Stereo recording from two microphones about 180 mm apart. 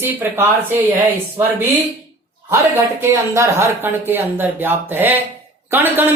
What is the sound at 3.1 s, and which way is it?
Speech, 15° right (ahead or behind).